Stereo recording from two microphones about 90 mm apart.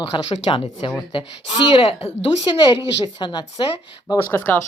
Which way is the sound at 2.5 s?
65° left (ahead or behind).